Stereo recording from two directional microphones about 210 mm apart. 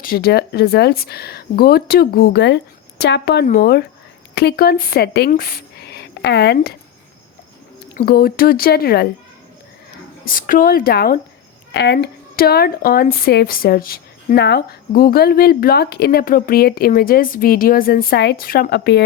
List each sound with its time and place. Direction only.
0.0 s speech: 45° left (ahead or behind)
7.9 s speech: 45° left (ahead or behind)
10.2 s speech: 40° left (ahead or behind)
11.7 s speech: 55° left (ahead or behind)